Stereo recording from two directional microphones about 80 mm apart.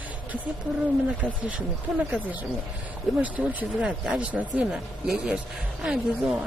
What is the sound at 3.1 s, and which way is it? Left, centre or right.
A man's voice, centre.